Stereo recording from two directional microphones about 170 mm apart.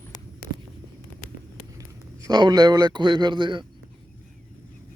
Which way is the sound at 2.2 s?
25° right (ahead or behind).